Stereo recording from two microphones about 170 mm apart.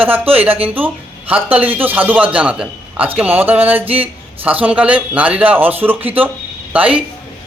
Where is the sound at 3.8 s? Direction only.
35° right (ahead or behind).